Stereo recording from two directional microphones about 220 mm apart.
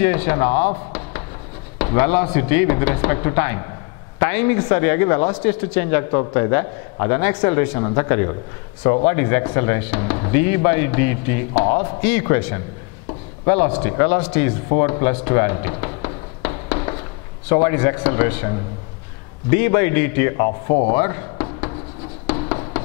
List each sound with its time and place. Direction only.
0.0 s speech: 15° left (ahead or behind)
1.8 s speech: 15° left (ahead or behind)
13.8 s speech: 15° left (ahead or behind)
14.8 s a sound: 20° left (ahead or behind)
17.5 s speech: 15° left (ahead or behind)
19.5 s speech: 15° left (ahead or behind)
21.0 s a sound: 15° left (ahead or behind)
22.3 s writing: 20° left (ahead or behind)